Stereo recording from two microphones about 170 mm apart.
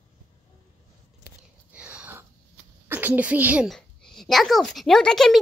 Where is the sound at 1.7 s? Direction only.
5° right (ahead or behind).